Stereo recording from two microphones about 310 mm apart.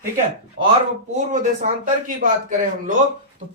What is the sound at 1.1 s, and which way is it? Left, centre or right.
Speech, right.